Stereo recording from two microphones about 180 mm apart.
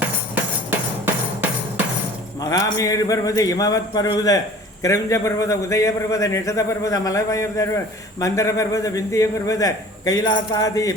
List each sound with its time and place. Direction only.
0.7 s music: 10° right (ahead or behind)
2.4 s a man's voice: 20° left (ahead or behind)